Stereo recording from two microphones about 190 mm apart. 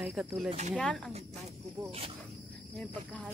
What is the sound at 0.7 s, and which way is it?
Speech, 5° left (ahead or behind).